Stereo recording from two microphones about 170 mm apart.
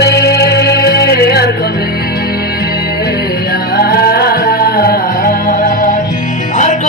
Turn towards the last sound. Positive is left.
turn(degrees=45)  # may be behind; listen again after turning